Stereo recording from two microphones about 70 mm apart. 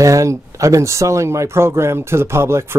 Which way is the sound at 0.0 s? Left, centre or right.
Right.